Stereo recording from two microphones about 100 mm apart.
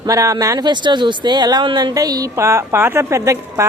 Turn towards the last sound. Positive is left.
turn(degrees=-30)  # may be behind; listen again after turning